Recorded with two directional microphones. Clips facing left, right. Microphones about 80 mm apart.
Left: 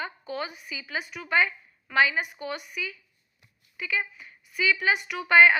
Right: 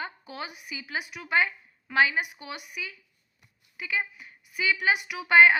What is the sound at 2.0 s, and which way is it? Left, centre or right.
A woman's voice, right.